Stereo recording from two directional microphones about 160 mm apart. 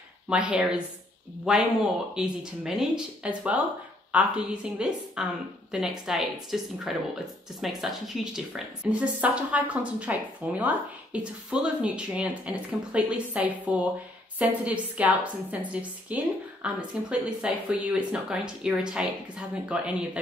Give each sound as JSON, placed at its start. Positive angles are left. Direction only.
{"t": 0.3, "sound": "a woman's voice", "side_deg": -5}